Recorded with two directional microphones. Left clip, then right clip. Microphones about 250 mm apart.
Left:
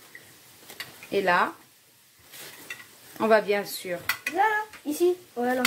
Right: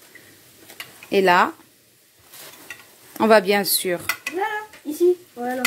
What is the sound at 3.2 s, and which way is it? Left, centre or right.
Speech, right.